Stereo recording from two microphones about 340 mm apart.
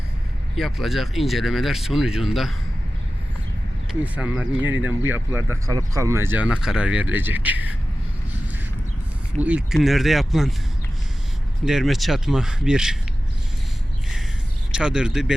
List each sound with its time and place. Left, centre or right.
0.5 s speech: centre
4.0 s speech: centre
9.4 s speech: centre
11.6 s speech: centre
14.7 s speech: centre